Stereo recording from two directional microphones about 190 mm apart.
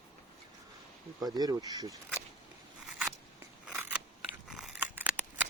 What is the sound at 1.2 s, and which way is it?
Speech, 20° right (ahead or behind).